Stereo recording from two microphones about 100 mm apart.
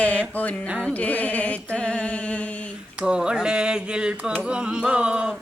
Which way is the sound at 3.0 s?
10° right (ahead or behind).